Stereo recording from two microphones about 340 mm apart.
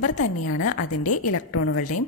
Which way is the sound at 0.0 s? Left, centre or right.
Left.